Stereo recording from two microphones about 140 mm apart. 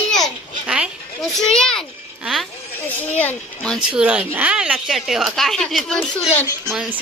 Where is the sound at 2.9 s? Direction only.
10° left (ahead or behind).